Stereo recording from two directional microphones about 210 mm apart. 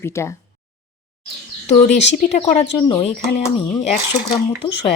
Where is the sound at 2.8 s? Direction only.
25° left (ahead or behind).